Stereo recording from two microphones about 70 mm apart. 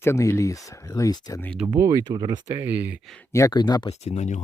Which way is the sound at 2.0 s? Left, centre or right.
Right.